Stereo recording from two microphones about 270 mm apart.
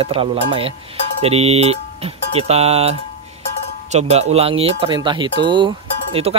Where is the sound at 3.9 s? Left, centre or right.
Right.